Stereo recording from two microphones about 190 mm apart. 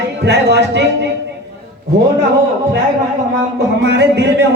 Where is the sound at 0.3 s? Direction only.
60° right (ahead or behind).